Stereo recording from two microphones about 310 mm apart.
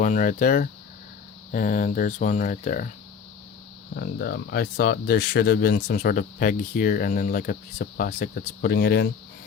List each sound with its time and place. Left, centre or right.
0.0 s speech: left
3.9 s speech: left